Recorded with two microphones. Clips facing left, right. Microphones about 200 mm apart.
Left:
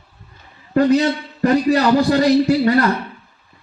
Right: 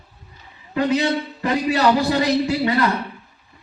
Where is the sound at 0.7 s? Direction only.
45° left (ahead or behind).